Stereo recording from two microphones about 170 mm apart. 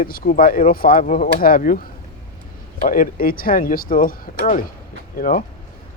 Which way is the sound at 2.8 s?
55° left (ahead or behind).